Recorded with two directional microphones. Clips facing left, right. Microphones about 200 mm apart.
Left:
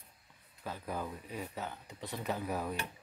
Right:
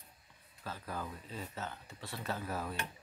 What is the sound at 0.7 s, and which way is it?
Speech, 15° left (ahead or behind).